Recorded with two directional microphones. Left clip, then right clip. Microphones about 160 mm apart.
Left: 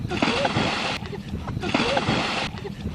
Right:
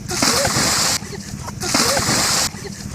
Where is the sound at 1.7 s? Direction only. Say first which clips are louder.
Right 5 dB; 25° right (ahead or behind).